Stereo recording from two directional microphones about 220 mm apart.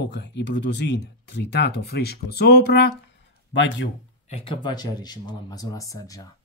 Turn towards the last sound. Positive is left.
turn(degrees=15)  # may be behind; listen again after turning